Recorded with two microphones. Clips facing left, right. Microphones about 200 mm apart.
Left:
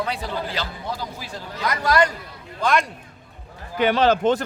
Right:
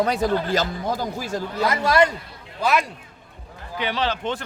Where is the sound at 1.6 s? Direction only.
25° right (ahead or behind).